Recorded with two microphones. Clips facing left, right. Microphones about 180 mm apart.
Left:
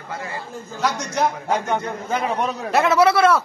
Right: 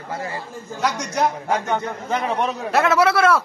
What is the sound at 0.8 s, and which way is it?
Speech, 10° right (ahead or behind).